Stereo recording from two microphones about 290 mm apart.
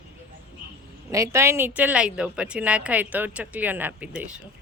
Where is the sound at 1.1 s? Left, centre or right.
Centre.